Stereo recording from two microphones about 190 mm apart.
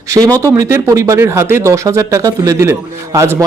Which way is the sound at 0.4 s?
15° right (ahead or behind).